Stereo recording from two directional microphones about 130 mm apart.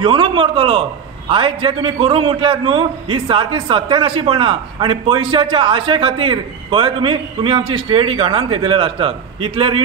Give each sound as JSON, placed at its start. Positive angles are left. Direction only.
{"t": 0.0, "sound": "a man's voice", "side_deg": -40}